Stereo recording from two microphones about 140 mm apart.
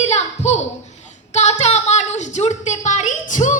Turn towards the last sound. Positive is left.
turn(degrees=60)  # may be behind; listen again after turning